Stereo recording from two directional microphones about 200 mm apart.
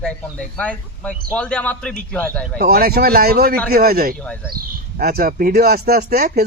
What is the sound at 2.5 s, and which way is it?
Speech, 50° right (ahead or behind).